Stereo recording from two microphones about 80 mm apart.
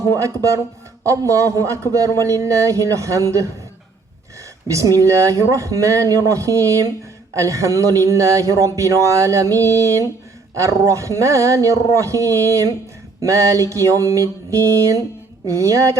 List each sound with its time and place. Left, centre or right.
0.1 s speech: right
4.7 s speech: right